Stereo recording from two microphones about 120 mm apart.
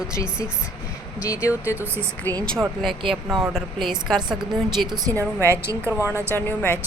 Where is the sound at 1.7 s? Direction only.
20° right (ahead or behind).